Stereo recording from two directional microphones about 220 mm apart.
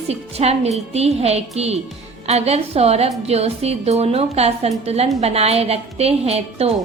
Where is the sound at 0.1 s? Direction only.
30° right (ahead or behind).